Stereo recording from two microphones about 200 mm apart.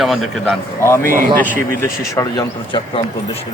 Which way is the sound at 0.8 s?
15° left (ahead or behind).